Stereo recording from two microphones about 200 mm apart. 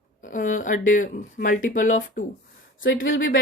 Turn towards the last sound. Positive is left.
turn(degrees=80)